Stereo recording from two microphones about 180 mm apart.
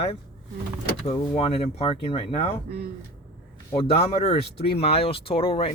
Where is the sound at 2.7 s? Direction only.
60° right (ahead or behind).